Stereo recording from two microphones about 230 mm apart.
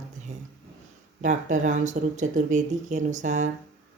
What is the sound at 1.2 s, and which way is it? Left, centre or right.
Speech, right.